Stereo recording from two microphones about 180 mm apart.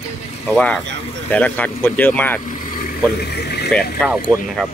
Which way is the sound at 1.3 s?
10° left (ahead or behind).